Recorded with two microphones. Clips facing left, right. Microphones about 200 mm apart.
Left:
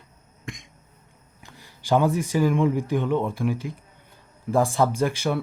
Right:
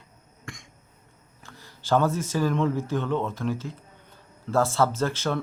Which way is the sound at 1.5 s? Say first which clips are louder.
Left 2 dB; 15° left (ahead or behind).